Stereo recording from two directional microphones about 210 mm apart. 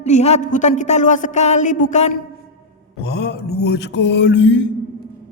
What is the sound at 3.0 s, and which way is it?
Mantra, 55° left (ahead or behind).